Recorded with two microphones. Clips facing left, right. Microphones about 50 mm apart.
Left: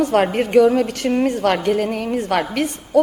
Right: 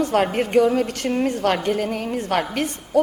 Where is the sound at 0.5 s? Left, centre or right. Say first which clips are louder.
Left 4 dB; left.